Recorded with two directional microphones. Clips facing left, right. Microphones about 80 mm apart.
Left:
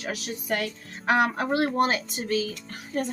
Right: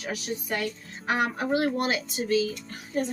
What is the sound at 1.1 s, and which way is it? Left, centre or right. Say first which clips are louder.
Speech: left 3 dB; left.